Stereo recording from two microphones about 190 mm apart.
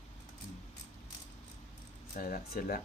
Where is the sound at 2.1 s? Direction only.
50° left (ahead or behind).